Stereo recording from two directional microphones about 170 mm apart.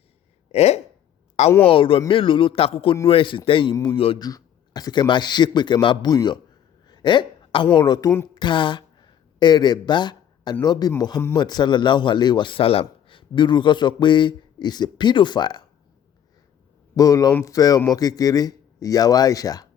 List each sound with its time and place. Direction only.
0.5 s speech: 40° left (ahead or behind)
4.3 s a man's voice: 20° left (ahead or behind)
6.8 s a sound: 25° left (ahead or behind)
7.8 s a man's voice: 25° left (ahead or behind)
16.9 s a man's voice: 20° left (ahead or behind)